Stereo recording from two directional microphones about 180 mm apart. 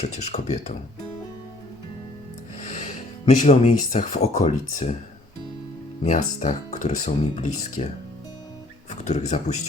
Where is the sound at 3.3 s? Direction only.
40° left (ahead or behind).